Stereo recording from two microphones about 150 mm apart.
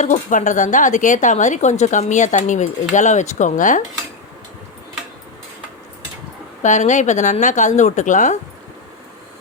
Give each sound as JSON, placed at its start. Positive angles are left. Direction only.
{"t": 0.0, "sound": "speech", "side_deg": 60}
{"t": 6.6, "sound": "a woman's voice", "side_deg": 55}